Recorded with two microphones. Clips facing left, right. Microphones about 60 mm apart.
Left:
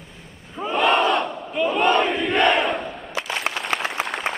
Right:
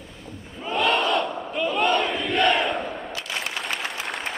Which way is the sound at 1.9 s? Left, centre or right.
Left.